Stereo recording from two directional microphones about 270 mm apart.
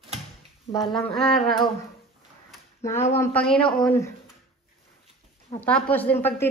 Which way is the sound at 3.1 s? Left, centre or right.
Centre.